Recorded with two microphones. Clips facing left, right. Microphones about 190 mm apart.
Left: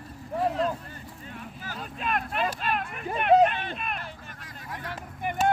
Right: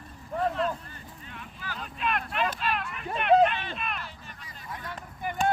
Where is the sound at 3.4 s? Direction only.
50° left (ahead or behind).